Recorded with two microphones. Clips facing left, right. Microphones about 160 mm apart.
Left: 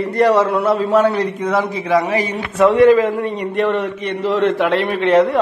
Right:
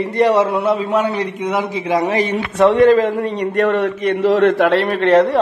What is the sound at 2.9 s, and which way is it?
A man's voice, 45° right (ahead or behind).